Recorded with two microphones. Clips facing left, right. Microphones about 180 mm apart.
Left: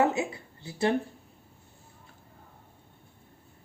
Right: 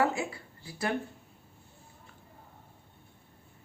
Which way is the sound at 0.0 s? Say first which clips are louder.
Left 3 dB; 20° left (ahead or behind).